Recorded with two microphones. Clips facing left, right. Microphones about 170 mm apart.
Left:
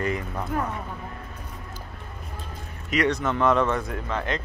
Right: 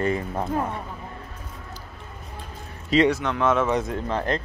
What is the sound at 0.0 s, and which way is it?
Speech, 30° right (ahead or behind).